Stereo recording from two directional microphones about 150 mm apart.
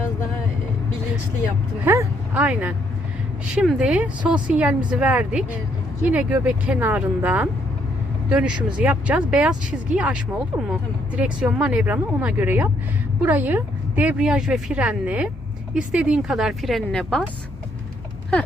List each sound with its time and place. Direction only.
1.8 s a woman's voice: 15° right (ahead or behind); by 17.2 s 5° left (ahead or behind)